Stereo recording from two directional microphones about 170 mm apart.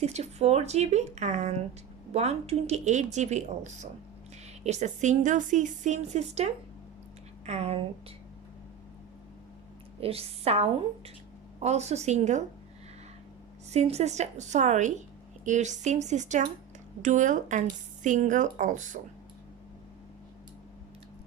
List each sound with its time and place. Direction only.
0.0 s a woman's voice: 40° right (ahead or behind)
10.0 s speech: 35° right (ahead or behind)
13.7 s a woman's voice: 40° right (ahead or behind)